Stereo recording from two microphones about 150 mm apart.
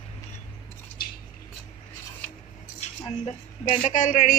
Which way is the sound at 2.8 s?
50° left (ahead or behind).